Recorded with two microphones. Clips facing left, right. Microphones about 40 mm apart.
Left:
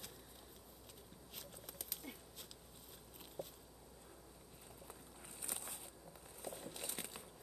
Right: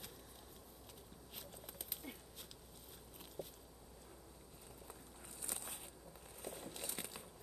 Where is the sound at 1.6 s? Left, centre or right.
Centre.